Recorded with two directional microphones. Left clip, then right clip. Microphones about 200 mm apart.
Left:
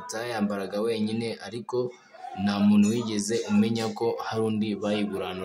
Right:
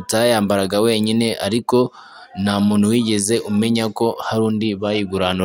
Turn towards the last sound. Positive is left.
turn(degrees=-45)  # may be behind; listen again after turning